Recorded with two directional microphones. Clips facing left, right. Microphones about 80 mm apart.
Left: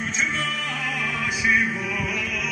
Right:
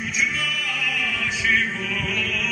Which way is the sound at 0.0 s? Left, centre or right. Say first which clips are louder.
Even; left.